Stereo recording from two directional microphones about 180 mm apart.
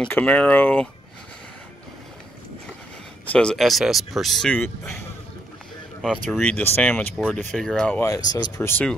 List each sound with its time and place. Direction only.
0.0 s speech: 10° left (ahead or behind)
3.3 s speech: 5° left (ahead or behind)
6.0 s speech: centre (ahead or behind)
8.0 s speech: 20° left (ahead or behind)